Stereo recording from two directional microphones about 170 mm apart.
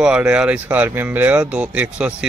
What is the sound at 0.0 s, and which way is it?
A man's voice, 5° right (ahead or behind).